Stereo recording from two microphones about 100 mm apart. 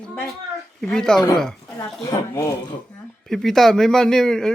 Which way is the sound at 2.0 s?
30° left (ahead or behind).